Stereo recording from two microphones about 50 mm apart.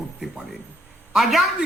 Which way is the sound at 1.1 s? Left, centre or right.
Centre.